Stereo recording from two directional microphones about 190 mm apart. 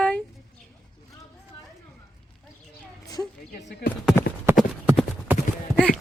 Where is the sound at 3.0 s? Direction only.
20° left (ahead or behind).